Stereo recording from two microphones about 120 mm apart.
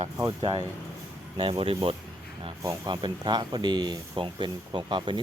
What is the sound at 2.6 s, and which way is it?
Speech, 35° right (ahead or behind).